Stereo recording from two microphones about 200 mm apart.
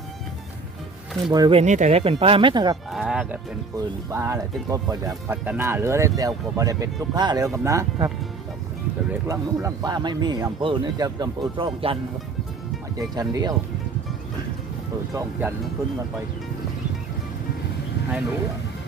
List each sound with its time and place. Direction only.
1.3 s speech: 20° right (ahead or behind)
2.9 s music: 5° right (ahead or behind)
3.8 s speech: 15° right (ahead or behind)
9.2 s speech: 15° right (ahead or behind)
13.0 s speech: 20° right (ahead or behind)
15.1 s speech: 15° right (ahead or behind)